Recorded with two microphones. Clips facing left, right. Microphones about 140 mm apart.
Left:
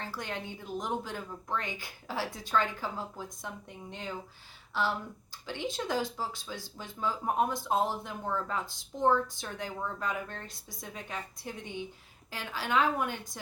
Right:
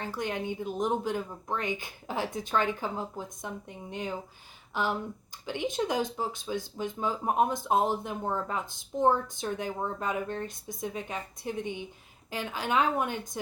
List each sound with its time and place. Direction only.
0.0 s speech: 20° right (ahead or behind)
4.7 s speech: 15° right (ahead or behind)